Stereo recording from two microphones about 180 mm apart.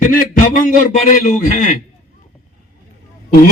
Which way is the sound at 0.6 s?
45° left (ahead or behind).